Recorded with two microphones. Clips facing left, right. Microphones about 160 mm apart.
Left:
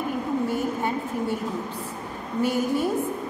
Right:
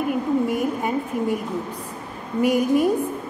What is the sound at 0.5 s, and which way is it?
Speech, 10° right (ahead or behind).